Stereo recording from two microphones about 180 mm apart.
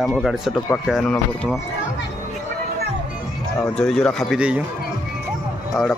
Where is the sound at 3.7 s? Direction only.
5° left (ahead or behind).